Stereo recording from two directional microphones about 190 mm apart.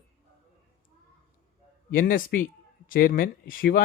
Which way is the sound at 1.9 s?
50° left (ahead or behind).